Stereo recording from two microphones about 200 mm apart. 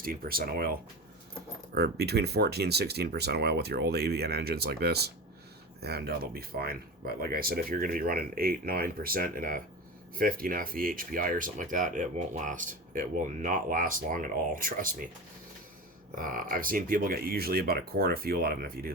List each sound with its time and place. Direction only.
0.0 s speech: 45° right (ahead or behind)
16.1 s speech: 45° right (ahead or behind)